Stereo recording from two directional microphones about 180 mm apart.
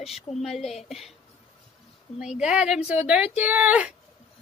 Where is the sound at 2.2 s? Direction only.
5° right (ahead or behind).